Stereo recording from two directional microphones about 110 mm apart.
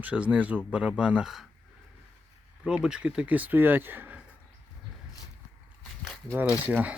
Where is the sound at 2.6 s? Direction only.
5° right (ahead or behind).